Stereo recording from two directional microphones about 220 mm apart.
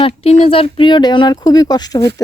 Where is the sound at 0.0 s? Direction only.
25° left (ahead or behind).